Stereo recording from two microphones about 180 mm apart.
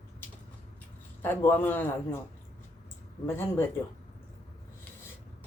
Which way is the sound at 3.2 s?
15° left (ahead or behind).